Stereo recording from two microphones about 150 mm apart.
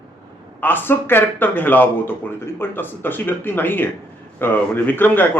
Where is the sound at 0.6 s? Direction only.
15° left (ahead or behind).